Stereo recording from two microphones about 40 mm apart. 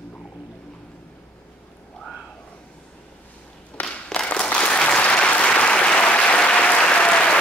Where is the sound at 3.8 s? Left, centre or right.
Left.